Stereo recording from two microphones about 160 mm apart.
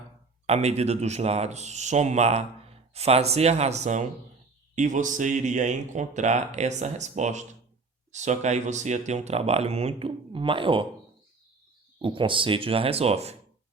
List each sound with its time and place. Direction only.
0.4 s speech: 40° right (ahead or behind)
12.0 s speech: 30° right (ahead or behind)